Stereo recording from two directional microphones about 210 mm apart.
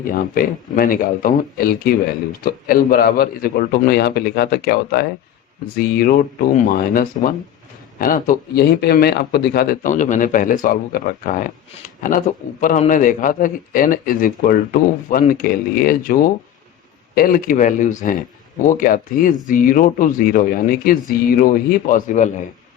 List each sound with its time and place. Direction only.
0.1 s a man's voice: 40° left (ahead or behind)